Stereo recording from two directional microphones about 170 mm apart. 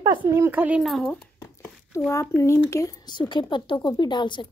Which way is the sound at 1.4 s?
15° left (ahead or behind).